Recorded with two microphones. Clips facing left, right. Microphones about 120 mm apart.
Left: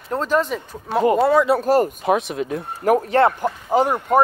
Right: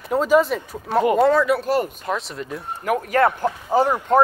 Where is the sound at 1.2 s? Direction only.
10° left (ahead or behind).